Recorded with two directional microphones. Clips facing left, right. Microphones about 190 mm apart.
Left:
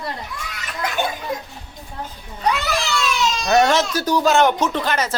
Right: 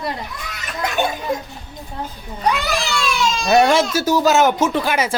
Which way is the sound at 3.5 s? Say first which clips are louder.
Right 2 dB; 10° right (ahead or behind).